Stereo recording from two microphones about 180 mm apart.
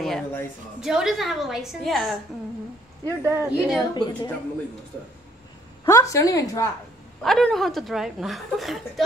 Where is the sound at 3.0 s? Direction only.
15° right (ahead or behind).